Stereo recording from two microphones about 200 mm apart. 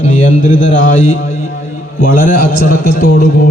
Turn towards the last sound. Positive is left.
turn(degrees=50)  # may be behind; listen again after turning